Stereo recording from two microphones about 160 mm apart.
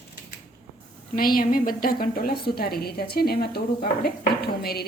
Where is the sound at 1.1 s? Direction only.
65° left (ahead or behind).